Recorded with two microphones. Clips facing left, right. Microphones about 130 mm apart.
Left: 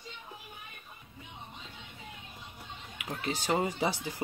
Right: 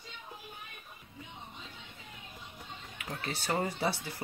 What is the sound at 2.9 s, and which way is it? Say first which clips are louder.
Speech: left 4 dB; 15° left (ahead or behind).